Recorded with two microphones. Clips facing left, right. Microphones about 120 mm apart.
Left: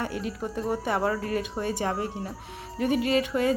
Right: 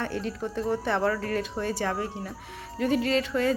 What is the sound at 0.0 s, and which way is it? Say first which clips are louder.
A woman's voice: even; 10° left (ahead or behind).